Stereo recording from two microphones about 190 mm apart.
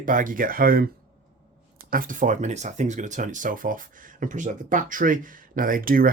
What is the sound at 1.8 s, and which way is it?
Speech, 45° right (ahead or behind).